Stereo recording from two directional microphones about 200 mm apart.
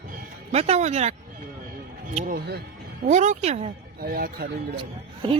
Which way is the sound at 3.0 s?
35° right (ahead or behind).